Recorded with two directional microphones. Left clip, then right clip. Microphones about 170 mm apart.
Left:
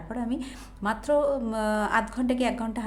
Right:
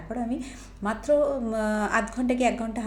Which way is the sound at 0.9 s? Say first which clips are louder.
Right 1 dB; 5° right (ahead or behind).